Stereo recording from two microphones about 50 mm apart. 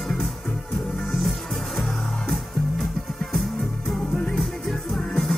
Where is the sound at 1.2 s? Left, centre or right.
Centre.